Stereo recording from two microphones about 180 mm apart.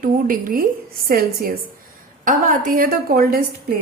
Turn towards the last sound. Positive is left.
turn(degrees=-55)  # may be behind; listen again after turning